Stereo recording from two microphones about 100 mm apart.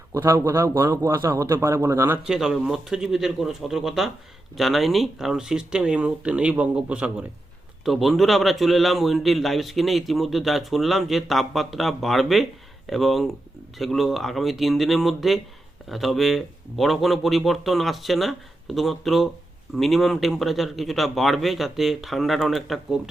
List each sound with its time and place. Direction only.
0.1 s a man's voice: 30° right (ahead or behind)
2.2 s a man's voice: 5° right (ahead or behind)
7.9 s a man's voice: centre (ahead or behind)